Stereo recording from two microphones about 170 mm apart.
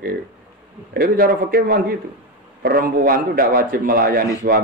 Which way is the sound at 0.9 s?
60° right (ahead or behind).